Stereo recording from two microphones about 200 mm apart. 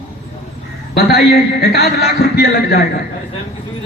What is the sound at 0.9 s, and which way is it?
A man's voice, 50° left (ahead or behind).